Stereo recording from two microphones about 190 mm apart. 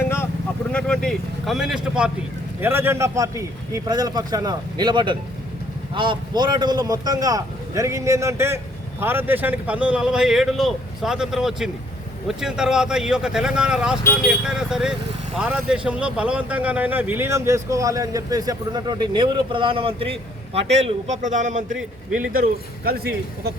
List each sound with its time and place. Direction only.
0.0 s vehicle: 10° left (ahead or behind)
0.7 s speech: 5° left (ahead or behind); by 23.5 s 55° right (ahead or behind)